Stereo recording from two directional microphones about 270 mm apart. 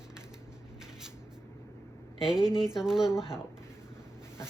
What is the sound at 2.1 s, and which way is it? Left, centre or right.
Speech, centre.